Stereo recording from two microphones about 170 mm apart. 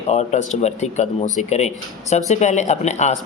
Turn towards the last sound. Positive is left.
turn(degrees=40)  # may be behind; listen again after turning